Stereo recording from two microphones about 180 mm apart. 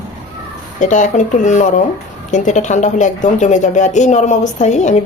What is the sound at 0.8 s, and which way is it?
A woman's voice, 45° left (ahead or behind).